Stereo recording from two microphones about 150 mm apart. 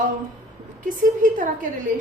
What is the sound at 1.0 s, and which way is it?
Speech, 60° right (ahead or behind).